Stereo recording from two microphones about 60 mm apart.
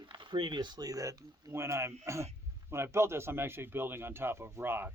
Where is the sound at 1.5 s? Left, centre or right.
Right.